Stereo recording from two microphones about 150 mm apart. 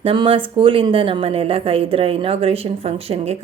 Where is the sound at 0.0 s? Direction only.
35° right (ahead or behind).